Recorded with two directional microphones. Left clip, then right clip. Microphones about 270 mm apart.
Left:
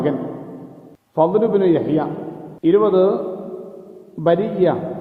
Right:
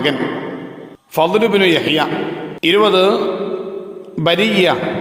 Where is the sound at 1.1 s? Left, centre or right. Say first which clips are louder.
Right 2 dB; right.